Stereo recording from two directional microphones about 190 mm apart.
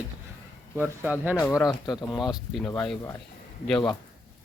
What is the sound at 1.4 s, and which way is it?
Speech, centre (ahead or behind).